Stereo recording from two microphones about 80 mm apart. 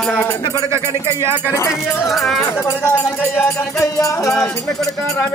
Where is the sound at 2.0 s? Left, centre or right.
Centre.